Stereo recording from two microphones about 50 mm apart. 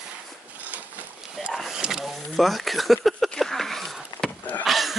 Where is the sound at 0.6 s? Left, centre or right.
Right.